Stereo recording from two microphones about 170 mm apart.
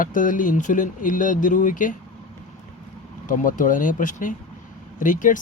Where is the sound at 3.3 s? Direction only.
50° left (ahead or behind).